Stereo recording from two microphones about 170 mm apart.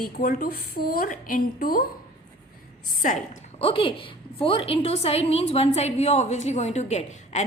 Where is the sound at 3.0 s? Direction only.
50° left (ahead or behind).